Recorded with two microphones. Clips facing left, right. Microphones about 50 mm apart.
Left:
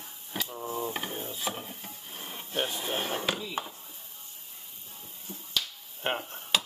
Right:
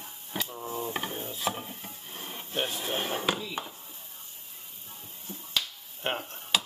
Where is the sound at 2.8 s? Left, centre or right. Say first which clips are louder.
Even; centre.